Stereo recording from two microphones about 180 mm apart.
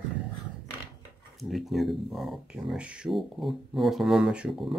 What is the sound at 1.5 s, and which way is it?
Speech, centre (ahead or behind).